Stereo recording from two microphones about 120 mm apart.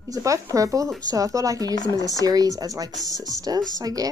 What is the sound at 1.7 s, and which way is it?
Speech, 30° left (ahead or behind).